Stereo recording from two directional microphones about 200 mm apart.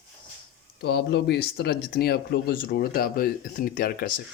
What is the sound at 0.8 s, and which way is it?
Speech, 55° left (ahead or behind).